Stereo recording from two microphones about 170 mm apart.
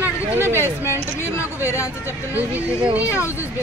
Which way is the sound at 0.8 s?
15° left (ahead or behind).